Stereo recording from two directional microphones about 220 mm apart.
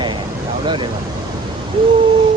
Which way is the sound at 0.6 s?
20° right (ahead or behind).